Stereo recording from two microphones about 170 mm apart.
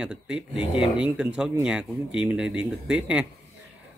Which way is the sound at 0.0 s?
5° right (ahead or behind).